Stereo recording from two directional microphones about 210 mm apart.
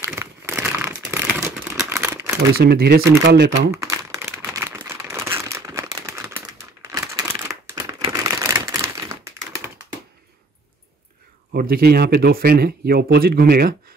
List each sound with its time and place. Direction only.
0.0 s crumpling: 10° right (ahead or behind)
0.8 s a sound: 10° right (ahead or behind)
2.5 s speech: 50° right (ahead or behind)
3.7 s crumpling: 15° right (ahead or behind)
11.5 s speech: 45° right (ahead or behind)